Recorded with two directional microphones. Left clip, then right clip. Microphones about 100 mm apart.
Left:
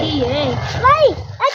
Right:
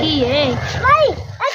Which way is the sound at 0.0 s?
30° right (ahead or behind).